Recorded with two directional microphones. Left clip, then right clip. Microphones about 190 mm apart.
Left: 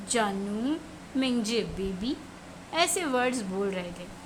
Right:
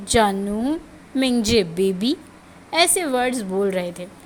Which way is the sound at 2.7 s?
20° right (ahead or behind).